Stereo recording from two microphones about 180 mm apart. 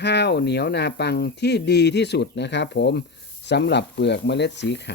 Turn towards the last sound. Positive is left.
turn(degrees=75)  # may be behind; listen again after turning